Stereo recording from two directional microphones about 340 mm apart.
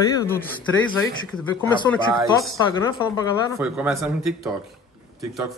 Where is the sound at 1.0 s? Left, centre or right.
Centre.